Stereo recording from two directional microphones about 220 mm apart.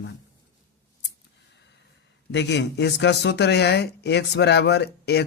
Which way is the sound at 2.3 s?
50° left (ahead or behind).